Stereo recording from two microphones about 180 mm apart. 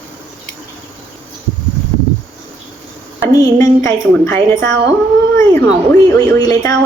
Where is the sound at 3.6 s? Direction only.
15° left (ahead or behind).